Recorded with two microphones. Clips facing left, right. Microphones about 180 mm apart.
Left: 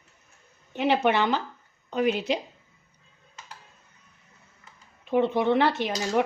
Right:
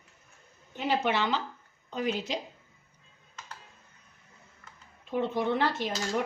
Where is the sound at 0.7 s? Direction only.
65° left (ahead or behind).